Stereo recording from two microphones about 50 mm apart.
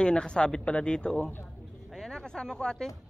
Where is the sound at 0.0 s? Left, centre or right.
Centre.